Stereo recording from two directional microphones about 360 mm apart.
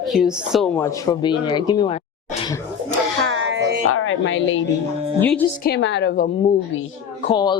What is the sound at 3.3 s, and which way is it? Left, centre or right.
Music, right.